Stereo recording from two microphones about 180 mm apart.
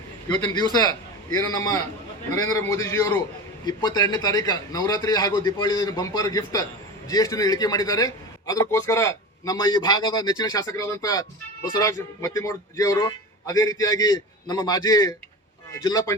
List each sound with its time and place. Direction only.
0.3 s a man's voice: 25° left (ahead or behind)